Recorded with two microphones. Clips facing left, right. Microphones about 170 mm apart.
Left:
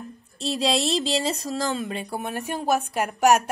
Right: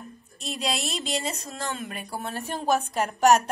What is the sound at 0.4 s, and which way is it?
Speech, 30° left (ahead or behind).